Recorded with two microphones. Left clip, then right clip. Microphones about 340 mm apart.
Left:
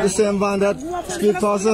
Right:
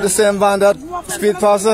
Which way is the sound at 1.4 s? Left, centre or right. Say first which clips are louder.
Right 6 dB; right.